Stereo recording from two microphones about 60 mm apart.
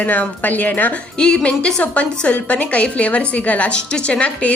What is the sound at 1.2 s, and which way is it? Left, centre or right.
A woman's voice, centre.